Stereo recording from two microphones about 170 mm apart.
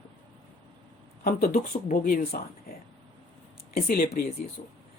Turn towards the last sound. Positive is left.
turn(degrees=60)  # may be behind; listen again after turning